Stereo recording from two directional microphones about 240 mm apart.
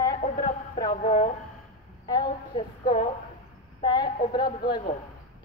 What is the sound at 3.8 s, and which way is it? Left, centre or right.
Speech, centre.